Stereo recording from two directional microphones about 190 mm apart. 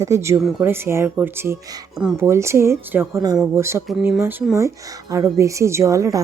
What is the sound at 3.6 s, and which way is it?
Speech, 15° right (ahead or behind).